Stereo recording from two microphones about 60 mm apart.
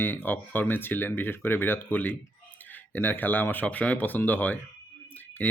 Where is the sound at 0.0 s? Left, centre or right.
Left.